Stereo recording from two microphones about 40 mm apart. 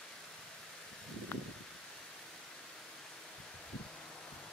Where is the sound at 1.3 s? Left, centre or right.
Left.